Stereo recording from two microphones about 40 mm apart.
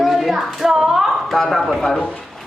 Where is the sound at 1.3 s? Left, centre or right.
Centre.